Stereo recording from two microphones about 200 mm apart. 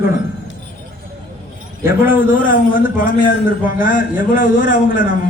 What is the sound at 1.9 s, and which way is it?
Speech, 45° left (ahead or behind).